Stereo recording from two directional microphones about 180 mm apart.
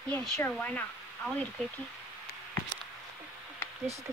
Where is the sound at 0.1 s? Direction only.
5° left (ahead or behind).